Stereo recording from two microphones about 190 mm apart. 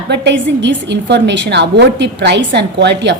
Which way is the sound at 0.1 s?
65° right (ahead or behind).